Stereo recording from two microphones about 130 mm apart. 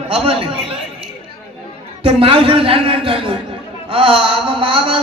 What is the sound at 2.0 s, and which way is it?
A man's voice, 45° right (ahead or behind).